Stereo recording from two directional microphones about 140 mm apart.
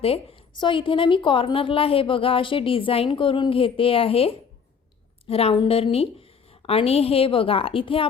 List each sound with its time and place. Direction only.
0.0 s a woman's voice: 40° left (ahead or behind)